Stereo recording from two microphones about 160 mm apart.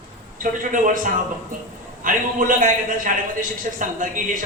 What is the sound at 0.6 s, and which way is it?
Speech, 55° right (ahead or behind).